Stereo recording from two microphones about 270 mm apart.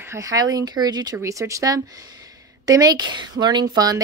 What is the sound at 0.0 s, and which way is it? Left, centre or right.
Speech, centre.